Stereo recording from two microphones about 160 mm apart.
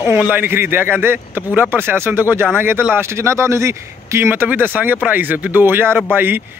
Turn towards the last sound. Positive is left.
turn(degrees=-15)  # may be behind; listen again after turning